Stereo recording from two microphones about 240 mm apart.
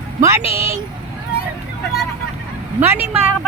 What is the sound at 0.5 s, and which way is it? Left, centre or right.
Vehicle, centre.